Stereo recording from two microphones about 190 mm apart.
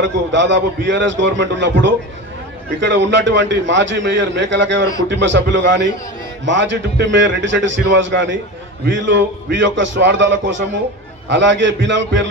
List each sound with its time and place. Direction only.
0.0 s a man's voice: 70° right (ahead or behind)